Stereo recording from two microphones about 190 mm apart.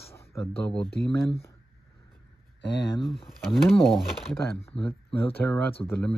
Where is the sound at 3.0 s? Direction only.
Centre (ahead or behind).